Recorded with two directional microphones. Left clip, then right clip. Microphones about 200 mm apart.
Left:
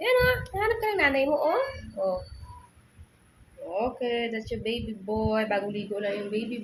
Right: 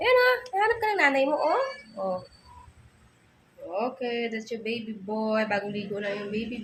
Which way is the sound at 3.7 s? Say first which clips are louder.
Left 1 dB; 5° right (ahead or behind).